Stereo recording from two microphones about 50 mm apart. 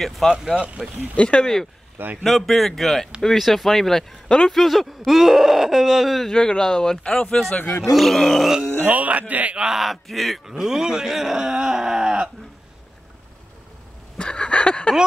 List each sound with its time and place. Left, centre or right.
0.0 s speech: centre
0.3 s speech: centre
1.1 s speech: left
1.4 s speech: centre
6.3 s speech: centre
7.9 s speech: centre
8.7 s speech: right
9.6 s speech: centre
10.4 s speech: centre
14.1 s a sound: left